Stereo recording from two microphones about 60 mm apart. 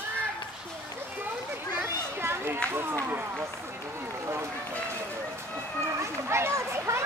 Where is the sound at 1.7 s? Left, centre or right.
Right.